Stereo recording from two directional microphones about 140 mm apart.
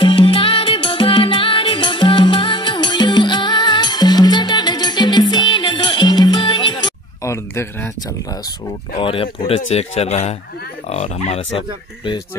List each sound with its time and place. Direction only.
0.0 s music: 35° left (ahead or behind)
7.2 s a sound: 20° left (ahead or behind)
8.9 s speech: 40° left (ahead or behind)